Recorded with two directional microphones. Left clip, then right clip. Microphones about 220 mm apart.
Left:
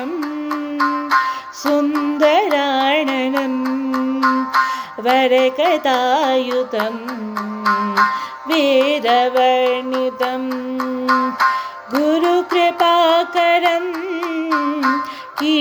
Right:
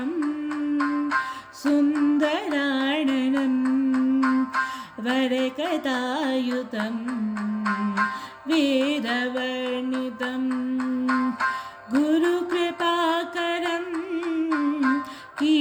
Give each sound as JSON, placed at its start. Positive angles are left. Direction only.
{"t": 0.8, "sound": "music", "side_deg": 35}
{"t": 2.1, "sound": "music", "side_deg": -15}
{"t": 3.6, "sound": "music", "side_deg": 35}
{"t": 5.0, "sound": "music", "side_deg": -15}
{"t": 7.6, "sound": "music", "side_deg": 35}
{"t": 8.5, "sound": "music", "side_deg": -15}
{"t": 10.8, "sound": "music", "side_deg": 35}
{"t": 12.0, "sound": "music", "side_deg": -15}
{"t": 14.5, "sound": "child singing", "side_deg": 35}